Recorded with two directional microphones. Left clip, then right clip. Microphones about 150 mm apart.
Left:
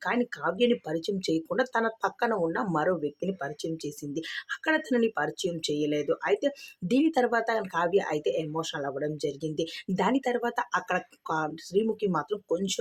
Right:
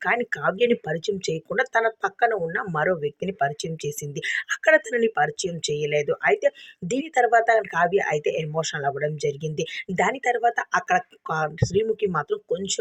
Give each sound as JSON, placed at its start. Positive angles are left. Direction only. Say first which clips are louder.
{"t": 0.0, "sound": "speech", "louder": "right 6 dB", "side_deg": -40}